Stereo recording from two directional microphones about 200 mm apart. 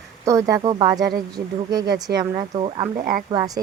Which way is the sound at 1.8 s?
55° right (ahead or behind).